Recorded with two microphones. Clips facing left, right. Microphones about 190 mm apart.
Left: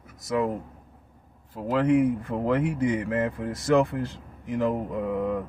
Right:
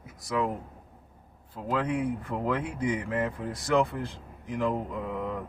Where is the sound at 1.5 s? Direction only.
55° left (ahead or behind).